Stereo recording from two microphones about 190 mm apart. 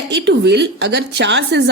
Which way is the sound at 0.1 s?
65° right (ahead or behind).